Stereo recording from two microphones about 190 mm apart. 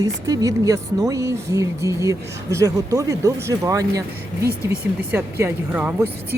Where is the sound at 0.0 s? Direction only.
20° right (ahead or behind).